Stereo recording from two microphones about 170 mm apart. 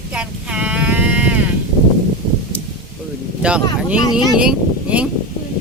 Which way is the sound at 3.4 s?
5° right (ahead or behind).